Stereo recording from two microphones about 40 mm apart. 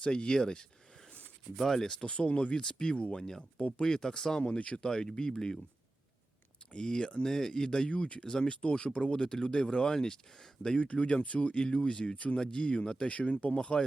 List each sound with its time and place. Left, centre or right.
0.0 s speech: left
2.0 s speech: left
4.4 s speech: left
4.9 s speech: centre
6.7 s speech: left
13.1 s speech: left
13.6 s speech: left